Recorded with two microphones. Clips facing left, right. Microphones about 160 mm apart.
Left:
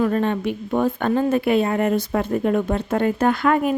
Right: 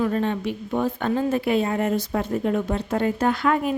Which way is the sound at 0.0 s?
60° left (ahead or behind).